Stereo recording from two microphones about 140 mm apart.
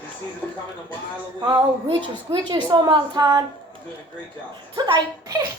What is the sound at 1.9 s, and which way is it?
A woman's voice, 35° right (ahead or behind).